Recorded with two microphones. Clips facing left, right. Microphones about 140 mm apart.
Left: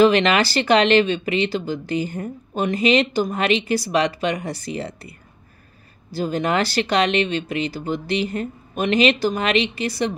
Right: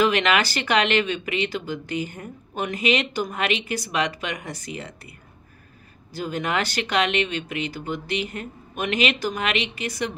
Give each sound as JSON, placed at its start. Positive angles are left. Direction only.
{"t": 0.0, "sound": "speech", "side_deg": 35}
{"t": 6.1, "sound": "speech", "side_deg": 35}